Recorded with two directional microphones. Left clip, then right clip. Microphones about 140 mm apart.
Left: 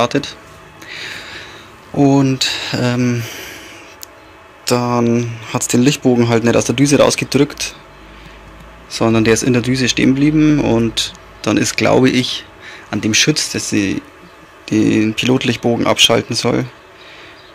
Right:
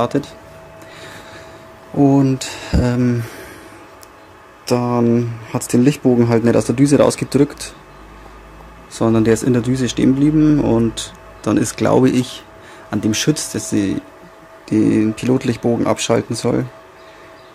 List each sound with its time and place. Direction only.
0.0 s speech: 15° right (ahead or behind)
0.9 s a sound: 10° right (ahead or behind)
2.0 s speech: 15° right (ahead or behind)
4.9 s speech: 20° right (ahead or behind)
8.9 s speech: 15° right (ahead or behind)